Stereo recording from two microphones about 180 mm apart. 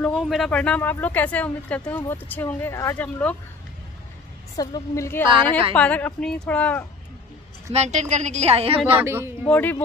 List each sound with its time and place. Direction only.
0.0 s speech: centre (ahead or behind)
4.6 s speech: 20° left (ahead or behind)
7.7 s a woman's voice: 40° right (ahead or behind)
8.9 s speech: 15° right (ahead or behind)
9.5 s speech: 10° left (ahead or behind)